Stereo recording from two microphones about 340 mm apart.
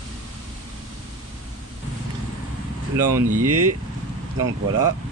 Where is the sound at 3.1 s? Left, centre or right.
Right.